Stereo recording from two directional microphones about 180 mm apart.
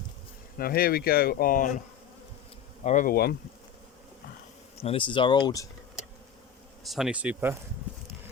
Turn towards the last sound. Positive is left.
turn(degrees=-10)  # may be behind; listen again after turning